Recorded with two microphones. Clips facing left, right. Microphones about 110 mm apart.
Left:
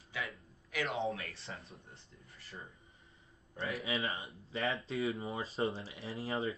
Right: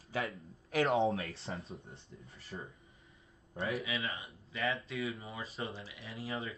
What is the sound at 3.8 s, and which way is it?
Speech, 30° left (ahead or behind).